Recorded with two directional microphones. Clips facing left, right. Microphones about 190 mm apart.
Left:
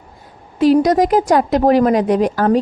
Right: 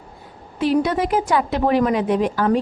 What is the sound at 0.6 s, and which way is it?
A woman's voice, 40° left (ahead or behind).